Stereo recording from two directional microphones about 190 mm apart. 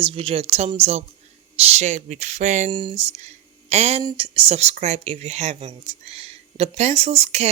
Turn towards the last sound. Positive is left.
turn(degrees=-35)  # may be behind; listen again after turning